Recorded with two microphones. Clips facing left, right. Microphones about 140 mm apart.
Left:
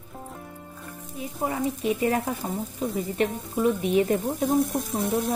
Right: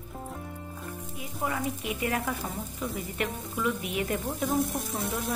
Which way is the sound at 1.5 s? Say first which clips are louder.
Left 9 dB; 30° left (ahead or behind).